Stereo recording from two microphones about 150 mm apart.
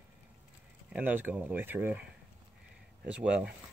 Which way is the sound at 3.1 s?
10° right (ahead or behind).